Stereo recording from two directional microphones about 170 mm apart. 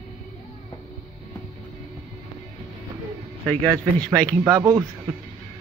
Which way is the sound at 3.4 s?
5° left (ahead or behind).